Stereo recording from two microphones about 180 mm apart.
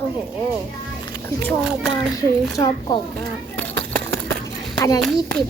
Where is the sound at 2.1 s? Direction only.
20° left (ahead or behind).